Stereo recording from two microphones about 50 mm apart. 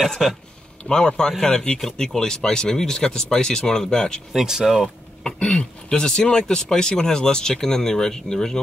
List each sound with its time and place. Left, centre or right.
0.2 s speech: centre
0.8 s speech: centre
4.3 s speech: centre
5.2 s speech: centre